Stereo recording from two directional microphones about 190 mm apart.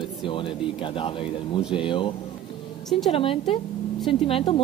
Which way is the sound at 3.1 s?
30° left (ahead or behind).